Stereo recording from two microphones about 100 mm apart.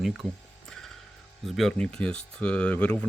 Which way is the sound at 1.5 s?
Centre (ahead or behind).